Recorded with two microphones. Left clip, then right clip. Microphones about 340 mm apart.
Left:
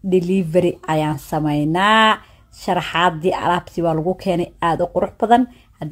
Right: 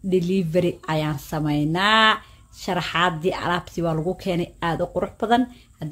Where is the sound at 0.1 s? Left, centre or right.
Centre.